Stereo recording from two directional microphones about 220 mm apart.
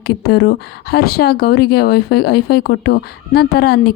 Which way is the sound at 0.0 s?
50° left (ahead or behind).